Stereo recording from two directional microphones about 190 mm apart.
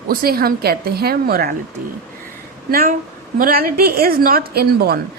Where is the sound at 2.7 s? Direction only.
50° right (ahead or behind).